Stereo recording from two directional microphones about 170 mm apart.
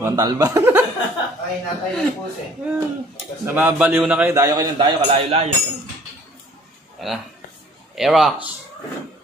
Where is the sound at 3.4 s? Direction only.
10° right (ahead or behind); by 5.4 s 35° right (ahead or behind).